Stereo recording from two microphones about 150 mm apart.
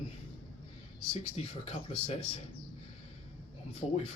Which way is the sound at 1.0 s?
40° left (ahead or behind).